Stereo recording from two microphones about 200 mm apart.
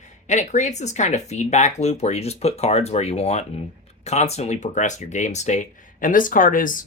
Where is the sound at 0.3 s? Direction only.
35° left (ahead or behind).